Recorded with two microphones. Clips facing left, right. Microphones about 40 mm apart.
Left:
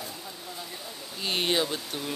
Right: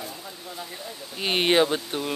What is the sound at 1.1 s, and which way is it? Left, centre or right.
Speech, right.